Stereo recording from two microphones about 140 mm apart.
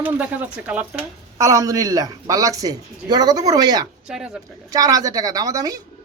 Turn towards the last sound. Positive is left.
turn(degrees=-25)  # may be behind; listen again after turning